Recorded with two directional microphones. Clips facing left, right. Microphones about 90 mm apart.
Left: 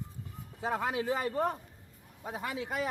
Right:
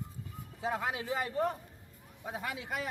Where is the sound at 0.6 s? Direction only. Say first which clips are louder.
Left 2 dB; 40° left (ahead or behind).